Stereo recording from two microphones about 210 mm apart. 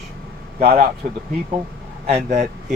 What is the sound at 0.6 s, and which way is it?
Speech, 45° right (ahead or behind).